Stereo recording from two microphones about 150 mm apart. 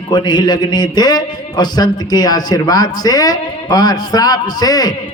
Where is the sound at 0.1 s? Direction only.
30° left (ahead or behind).